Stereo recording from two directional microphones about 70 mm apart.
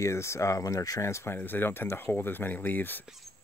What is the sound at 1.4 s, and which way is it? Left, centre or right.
Speech, left.